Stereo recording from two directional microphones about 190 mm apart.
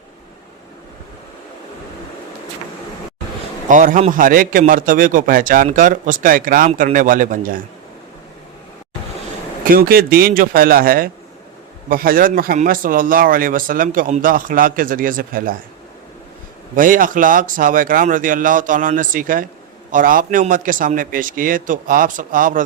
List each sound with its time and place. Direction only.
3.7 s a man's voice: 45° right (ahead or behind)
9.6 s a man's voice: 50° right (ahead or behind)
16.7 s a man's voice: 45° right (ahead or behind)